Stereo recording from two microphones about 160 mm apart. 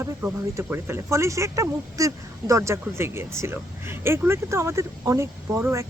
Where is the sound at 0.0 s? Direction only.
15° right (ahead or behind).